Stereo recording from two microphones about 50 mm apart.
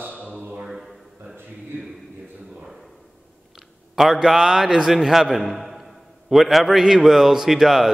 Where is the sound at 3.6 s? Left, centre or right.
Centre.